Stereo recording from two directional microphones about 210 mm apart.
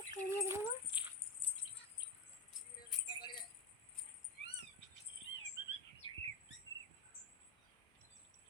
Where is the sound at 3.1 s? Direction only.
20° left (ahead or behind).